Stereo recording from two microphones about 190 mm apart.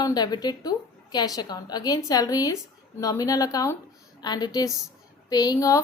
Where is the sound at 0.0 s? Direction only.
20° left (ahead or behind).